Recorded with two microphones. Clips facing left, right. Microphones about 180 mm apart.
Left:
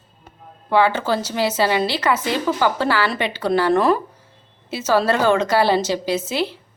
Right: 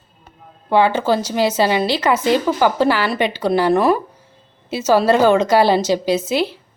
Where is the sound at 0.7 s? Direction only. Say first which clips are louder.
Right 3 dB; 15° right (ahead or behind).